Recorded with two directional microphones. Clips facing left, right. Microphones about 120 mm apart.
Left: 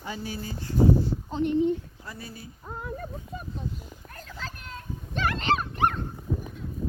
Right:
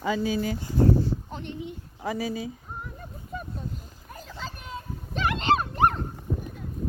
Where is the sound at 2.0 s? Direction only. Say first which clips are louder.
Right 12 dB; 90° right.